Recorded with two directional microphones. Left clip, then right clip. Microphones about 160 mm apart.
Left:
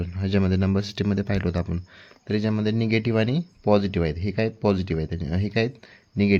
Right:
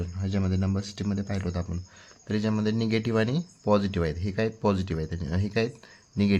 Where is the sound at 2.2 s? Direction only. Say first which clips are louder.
Left 3 dB; 25° left (ahead or behind).